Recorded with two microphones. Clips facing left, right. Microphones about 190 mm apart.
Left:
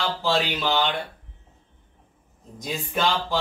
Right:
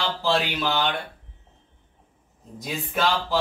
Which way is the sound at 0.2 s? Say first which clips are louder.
Right 1 dB; centre (ahead or behind).